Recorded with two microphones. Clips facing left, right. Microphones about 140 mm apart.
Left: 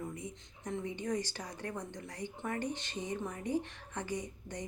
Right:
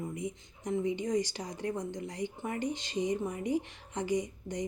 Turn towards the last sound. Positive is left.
turn(degrees=-15)  # may be behind; listen again after turning